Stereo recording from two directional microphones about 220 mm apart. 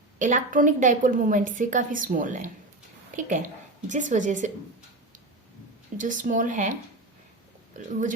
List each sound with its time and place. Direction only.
0.2 s a woman's voice: 35° right (ahead or behind)
6.0 s a woman's voice: 35° right (ahead or behind)